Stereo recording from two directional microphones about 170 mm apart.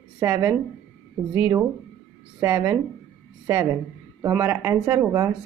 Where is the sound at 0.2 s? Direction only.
20° right (ahead or behind).